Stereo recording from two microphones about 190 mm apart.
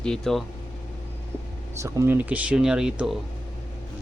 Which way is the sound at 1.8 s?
15° right (ahead or behind).